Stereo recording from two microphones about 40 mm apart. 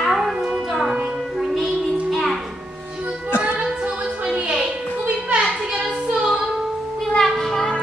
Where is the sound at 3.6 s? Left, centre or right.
Right.